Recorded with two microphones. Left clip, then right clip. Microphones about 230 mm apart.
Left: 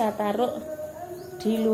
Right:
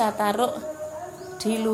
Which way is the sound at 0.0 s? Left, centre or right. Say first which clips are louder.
Right 2 dB; right.